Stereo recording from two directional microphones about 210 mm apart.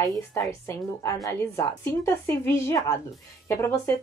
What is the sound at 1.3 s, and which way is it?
A woman's voice, 15° left (ahead or behind).